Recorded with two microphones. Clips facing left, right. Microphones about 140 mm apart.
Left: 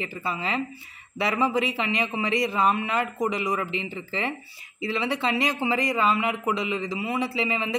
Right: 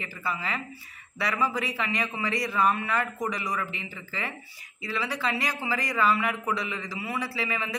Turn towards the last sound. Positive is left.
turn(degrees=25)  # may be behind; listen again after turning